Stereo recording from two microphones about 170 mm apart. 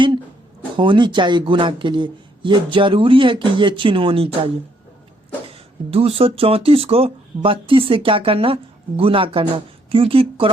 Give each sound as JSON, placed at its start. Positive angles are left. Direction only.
{"t": 0.8, "sound": "speech", "side_deg": -30}
{"t": 5.5, "sound": "speech", "side_deg": -35}